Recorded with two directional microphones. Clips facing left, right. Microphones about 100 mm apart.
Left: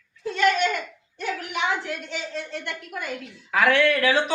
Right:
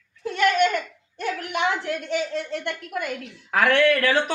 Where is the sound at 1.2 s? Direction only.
55° right (ahead or behind).